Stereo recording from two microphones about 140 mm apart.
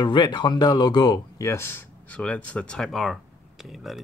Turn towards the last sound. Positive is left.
turn(degrees=0)  # may be behind; listen again after turning